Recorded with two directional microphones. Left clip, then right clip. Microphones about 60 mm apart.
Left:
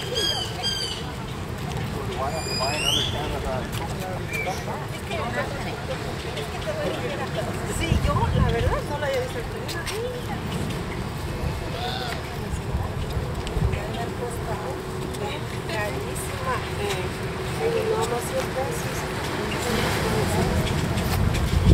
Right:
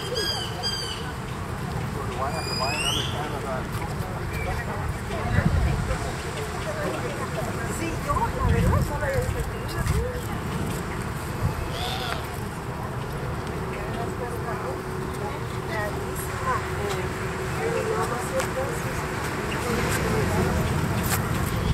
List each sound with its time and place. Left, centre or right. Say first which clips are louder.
19.7 s vehicle: left 1 dB; left